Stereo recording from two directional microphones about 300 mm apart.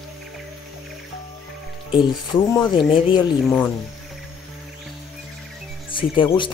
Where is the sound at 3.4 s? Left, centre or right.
Centre.